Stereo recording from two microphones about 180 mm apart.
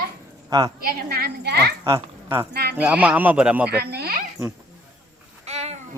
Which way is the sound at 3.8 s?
65° right (ahead or behind).